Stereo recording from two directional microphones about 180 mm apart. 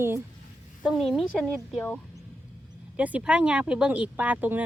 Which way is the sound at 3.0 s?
5° right (ahead or behind).